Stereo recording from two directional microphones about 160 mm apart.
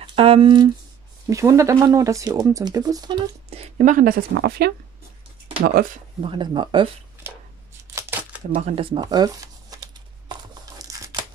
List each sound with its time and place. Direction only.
0.0 s speech: 35° right (ahead or behind)
1.3 s speech: 20° right (ahead or behind)
3.4 s speech: 40° right (ahead or behind); by 4.7 s 80° right
6.2 s speech: 30° right (ahead or behind)
7.9 s crumpling: 10° right (ahead or behind)
8.5 s shuffling cards: 40° right (ahead or behind); by 11.2 s 20° right (ahead or behind)